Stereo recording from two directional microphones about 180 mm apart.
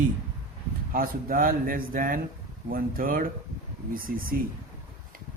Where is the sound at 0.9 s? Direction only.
50° right (ahead or behind).